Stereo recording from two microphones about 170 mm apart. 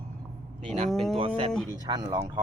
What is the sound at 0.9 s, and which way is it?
Speech, centre (ahead or behind).